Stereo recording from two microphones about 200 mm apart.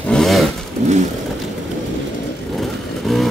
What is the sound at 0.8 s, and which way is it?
Vehicle, 35° right (ahead or behind).